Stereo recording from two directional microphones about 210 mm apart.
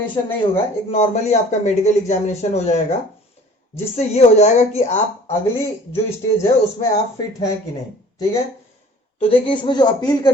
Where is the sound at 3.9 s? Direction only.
30° left (ahead or behind).